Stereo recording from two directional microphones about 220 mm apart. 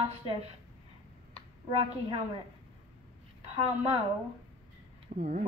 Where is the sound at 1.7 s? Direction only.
25° right (ahead or behind).